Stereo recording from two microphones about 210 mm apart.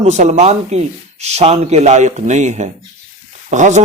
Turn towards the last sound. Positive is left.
turn(degrees=-35)  # may be behind; listen again after turning